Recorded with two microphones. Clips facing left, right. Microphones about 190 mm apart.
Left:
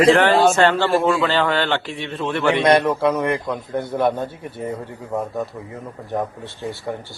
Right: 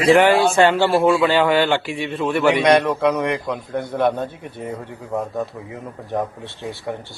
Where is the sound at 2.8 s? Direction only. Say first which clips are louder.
Even; 5° left (ahead or behind).